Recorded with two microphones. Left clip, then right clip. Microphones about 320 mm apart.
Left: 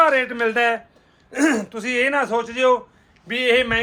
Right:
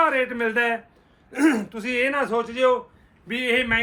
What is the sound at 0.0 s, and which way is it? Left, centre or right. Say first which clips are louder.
A man's voice: left 4 dB; left.